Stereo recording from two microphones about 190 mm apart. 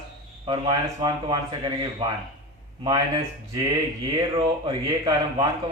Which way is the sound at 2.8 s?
20° right (ahead or behind).